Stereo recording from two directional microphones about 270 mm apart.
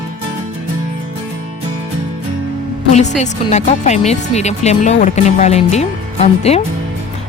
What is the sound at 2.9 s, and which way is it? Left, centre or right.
Speech, left.